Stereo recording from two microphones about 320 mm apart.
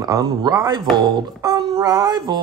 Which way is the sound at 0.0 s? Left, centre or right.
Centre.